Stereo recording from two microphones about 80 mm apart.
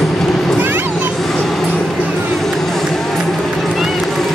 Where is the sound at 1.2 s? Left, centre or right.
Centre.